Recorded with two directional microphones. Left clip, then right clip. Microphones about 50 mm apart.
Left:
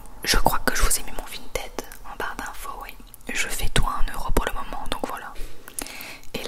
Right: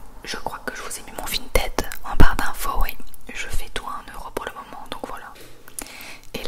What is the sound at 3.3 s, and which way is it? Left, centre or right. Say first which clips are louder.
Whispering: left 5 dB; left.